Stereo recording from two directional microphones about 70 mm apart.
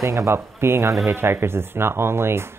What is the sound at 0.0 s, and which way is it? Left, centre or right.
Speech, right.